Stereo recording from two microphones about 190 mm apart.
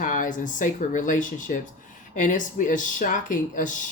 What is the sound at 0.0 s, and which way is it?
Speech, 45° left (ahead or behind).